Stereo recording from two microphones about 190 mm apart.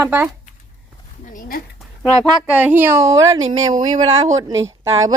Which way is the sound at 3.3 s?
90° right.